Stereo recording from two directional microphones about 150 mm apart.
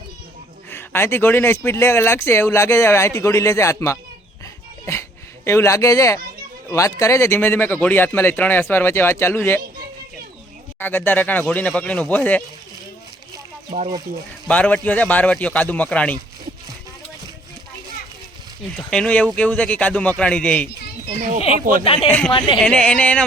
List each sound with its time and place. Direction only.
0.7 s speech: 15° left (ahead or behind)
5.5 s speech: 20° left (ahead or behind)
10.8 s speech: 15° left (ahead or behind)
13.7 s speech: 50° right (ahead or behind)
14.4 s speech: 10° left (ahead or behind)
18.9 s speech: 5° left (ahead or behind)
21.6 s speech: 65° right (ahead or behind)
22.3 s a woman's voice: 35° left (ahead or behind)
22.5 s speech: 5° left (ahead or behind)